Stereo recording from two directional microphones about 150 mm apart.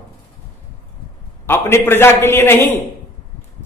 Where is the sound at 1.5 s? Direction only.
15° left (ahead or behind).